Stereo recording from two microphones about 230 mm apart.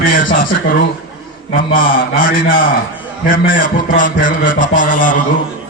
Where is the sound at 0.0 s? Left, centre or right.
Left.